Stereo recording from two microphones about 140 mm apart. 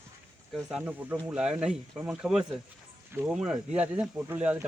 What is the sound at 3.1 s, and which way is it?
Speech, 15° right (ahead or behind).